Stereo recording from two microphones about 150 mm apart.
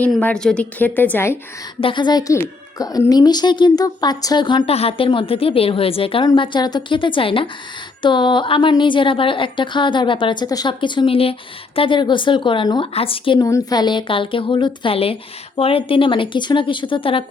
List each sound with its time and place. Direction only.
0.2 s a woman's voice: 10° left (ahead or behind)
1.8 s a woman's voice: 30° left (ahead or behind)
13.4 s a woman's voice: 25° left (ahead or behind)